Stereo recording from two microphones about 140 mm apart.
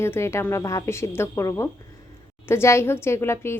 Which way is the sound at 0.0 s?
20° left (ahead or behind).